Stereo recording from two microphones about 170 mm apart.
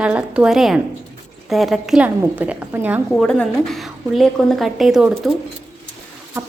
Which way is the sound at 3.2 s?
5° left (ahead or behind).